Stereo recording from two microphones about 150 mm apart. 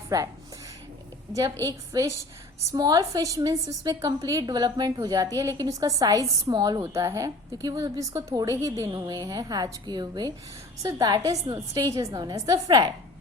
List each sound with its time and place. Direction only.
1.3 s a woman's voice: 25° right (ahead or behind)